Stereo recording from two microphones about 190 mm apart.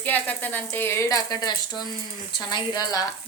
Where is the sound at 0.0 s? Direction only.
10° left (ahead or behind).